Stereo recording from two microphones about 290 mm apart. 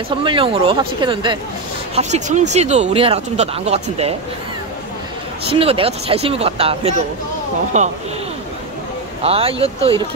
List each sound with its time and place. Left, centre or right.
0.1 s speech: centre
5.5 s speech: centre
9.2 s speech: centre